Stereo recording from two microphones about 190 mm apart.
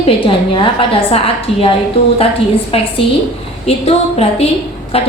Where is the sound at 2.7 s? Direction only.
30° left (ahead or behind).